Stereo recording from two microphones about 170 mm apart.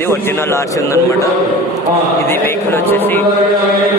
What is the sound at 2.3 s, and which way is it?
Speech, 15° left (ahead or behind).